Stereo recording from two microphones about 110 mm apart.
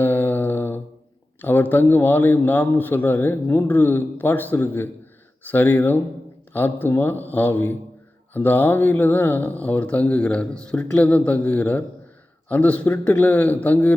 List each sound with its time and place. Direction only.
0.0 s mantra: 20° left (ahead or behind)
1.4 s a man's voice: 15° left (ahead or behind)